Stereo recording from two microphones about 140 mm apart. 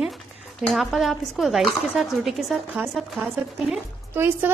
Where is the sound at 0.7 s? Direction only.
Centre (ahead or behind).